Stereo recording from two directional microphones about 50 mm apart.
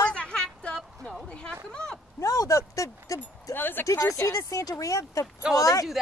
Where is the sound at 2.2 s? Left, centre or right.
Left.